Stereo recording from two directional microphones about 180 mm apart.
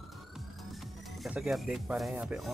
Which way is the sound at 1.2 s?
Centre (ahead or behind).